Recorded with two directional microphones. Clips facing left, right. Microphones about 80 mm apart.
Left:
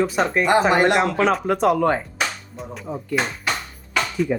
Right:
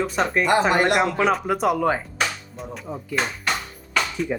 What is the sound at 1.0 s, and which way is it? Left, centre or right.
Speech, centre.